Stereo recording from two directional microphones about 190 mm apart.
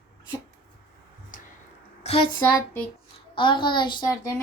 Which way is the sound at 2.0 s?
30° left (ahead or behind).